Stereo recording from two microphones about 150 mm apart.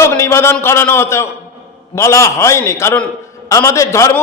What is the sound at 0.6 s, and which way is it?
A man's voice, 15° left (ahead or behind).